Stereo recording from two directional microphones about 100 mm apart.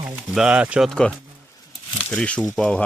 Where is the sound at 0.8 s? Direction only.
10° left (ahead or behind).